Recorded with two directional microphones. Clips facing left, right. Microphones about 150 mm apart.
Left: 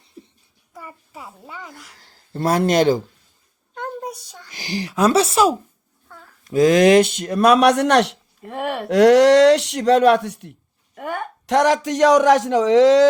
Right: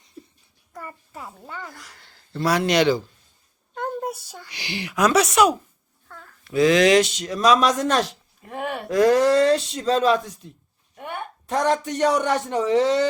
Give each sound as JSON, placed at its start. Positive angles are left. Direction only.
{"t": 0.7, "sound": "a child's voice", "side_deg": 5}
{"t": 2.0, "sound": "speech", "side_deg": 45}
{"t": 3.8, "sound": "a sound", "side_deg": -5}
{"t": 4.5, "sound": "speech", "side_deg": 40}
{"t": 6.4, "sound": "speech", "side_deg": 45}
{"t": 10.9, "sound": "a man's voice", "side_deg": 90}